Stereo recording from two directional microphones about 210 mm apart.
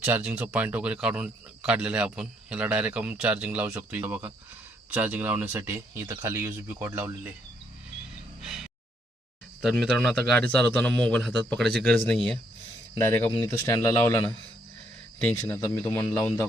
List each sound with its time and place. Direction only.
0.0 s speech: 5° right (ahead or behind)
8.4 s a sound: centre (ahead or behind)
9.6 s speech: centre (ahead or behind)
13.4 s speech: 15° left (ahead or behind)